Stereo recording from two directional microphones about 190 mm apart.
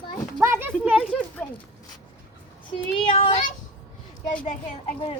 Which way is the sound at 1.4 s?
10° left (ahead or behind).